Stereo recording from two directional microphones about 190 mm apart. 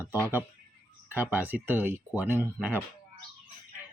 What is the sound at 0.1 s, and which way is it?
Speech, 10° right (ahead or behind).